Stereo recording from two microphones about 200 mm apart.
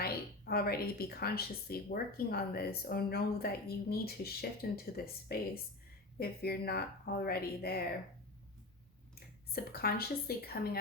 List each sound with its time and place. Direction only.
0.0 s a woman's voice: 50° left (ahead or behind)
6.1 s a woman's voice: 50° left (ahead or behind)
9.5 s a woman's voice: 50° left (ahead or behind)